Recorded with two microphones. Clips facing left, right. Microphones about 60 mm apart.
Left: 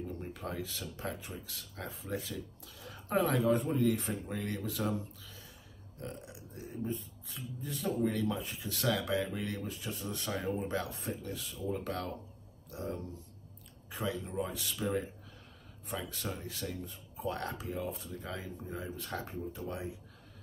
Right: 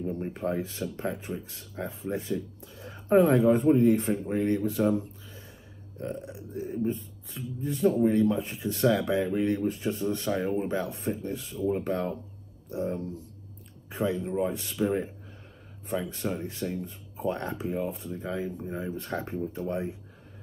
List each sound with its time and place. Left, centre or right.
0.0 s speech: right